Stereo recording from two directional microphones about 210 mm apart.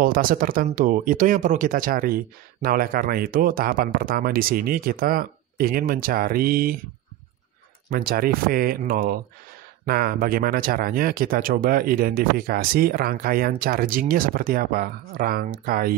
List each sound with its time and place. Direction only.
0.0 s speech: 40° right (ahead or behind)
7.9 s speech: 45° right (ahead or behind)